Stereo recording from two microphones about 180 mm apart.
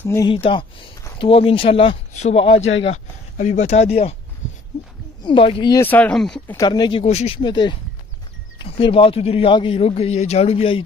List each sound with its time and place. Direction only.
0.0 s speech: 15° left (ahead or behind)
0.3 s a man's voice: 30° left (ahead or behind)
4.4 s a sound: 40° left (ahead or behind)
5.2 s speech: 30° left (ahead or behind)
5.8 s speech: 10° left (ahead or behind)
6.5 s a man's voice: 20° left (ahead or behind)